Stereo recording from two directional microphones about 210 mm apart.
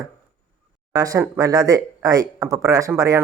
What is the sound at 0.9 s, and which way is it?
Speech, 15° right (ahead or behind).